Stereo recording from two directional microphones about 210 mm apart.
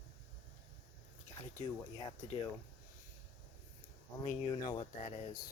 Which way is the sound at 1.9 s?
25° left (ahead or behind).